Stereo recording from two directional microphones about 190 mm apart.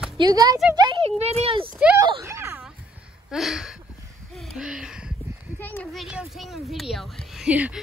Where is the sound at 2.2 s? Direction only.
15° right (ahead or behind).